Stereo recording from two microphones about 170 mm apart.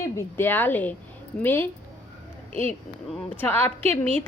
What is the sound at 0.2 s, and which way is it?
A woman's voice, 10° left (ahead or behind).